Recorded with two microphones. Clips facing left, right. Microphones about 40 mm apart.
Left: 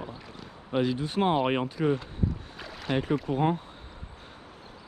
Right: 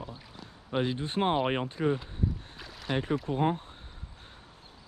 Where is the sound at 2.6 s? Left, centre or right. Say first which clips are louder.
Left 5 dB; centre.